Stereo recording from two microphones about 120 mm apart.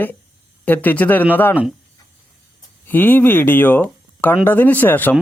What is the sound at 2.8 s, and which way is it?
Speech, 15° left (ahead or behind).